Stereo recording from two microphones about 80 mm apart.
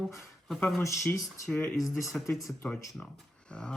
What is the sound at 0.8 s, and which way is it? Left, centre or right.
Speech, left.